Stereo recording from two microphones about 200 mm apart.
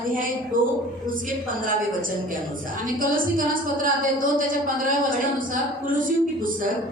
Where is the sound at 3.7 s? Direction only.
45° right (ahead or behind).